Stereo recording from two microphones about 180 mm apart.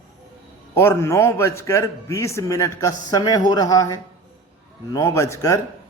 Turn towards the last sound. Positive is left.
turn(degrees=15)  # may be behind; listen again after turning